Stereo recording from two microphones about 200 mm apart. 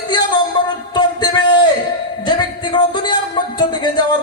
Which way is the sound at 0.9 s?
20° left (ahead or behind).